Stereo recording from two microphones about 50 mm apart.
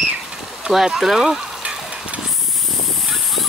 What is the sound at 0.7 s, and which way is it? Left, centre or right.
Speech, centre.